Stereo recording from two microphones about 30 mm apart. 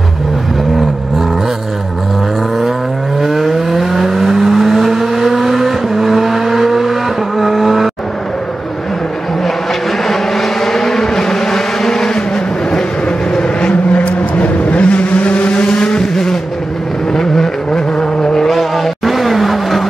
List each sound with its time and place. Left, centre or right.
3.2 s vehicle: centre
10.0 s vehicle: centre
13.4 s vehicle: left
13.9 s vehicle: left
15.7 s vehicle: left
17.1 s vehicle: centre
18.5 s vehicle: centre